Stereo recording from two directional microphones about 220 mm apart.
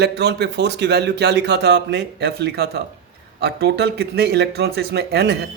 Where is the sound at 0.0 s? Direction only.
50° right (ahead or behind).